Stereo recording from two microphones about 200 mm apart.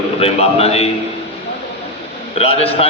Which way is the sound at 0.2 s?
30° left (ahead or behind).